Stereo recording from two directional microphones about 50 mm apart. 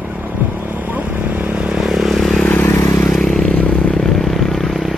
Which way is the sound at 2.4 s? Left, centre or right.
Left.